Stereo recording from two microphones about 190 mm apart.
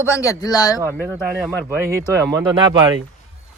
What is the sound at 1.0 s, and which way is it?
A man's voice, 10° right (ahead or behind).